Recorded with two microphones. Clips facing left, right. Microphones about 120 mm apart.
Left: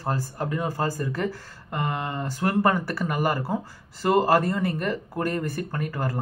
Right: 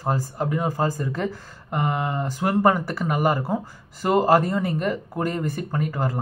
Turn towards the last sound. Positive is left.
turn(degrees=-15)  # may be behind; listen again after turning